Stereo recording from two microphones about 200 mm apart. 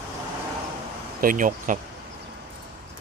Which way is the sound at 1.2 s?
40° right (ahead or behind).